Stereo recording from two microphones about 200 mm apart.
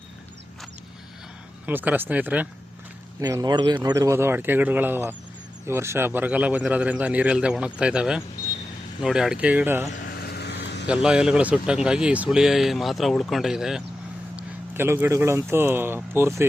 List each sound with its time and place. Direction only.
1.6 s a man's voice: 10° right (ahead or behind)
9.9 s vehicle: 50° left (ahead or behind)
10.8 s a man's voice: 5° right (ahead or behind)